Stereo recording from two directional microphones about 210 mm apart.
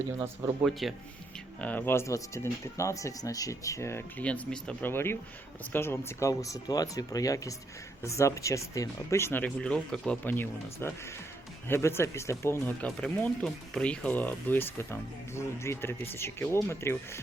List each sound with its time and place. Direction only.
0.2 s speech: 5° right (ahead or behind)
1.6 s speech: 10° left (ahead or behind)